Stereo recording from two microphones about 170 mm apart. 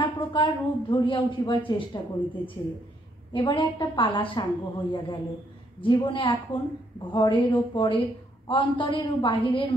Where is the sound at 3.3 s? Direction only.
30° left (ahead or behind).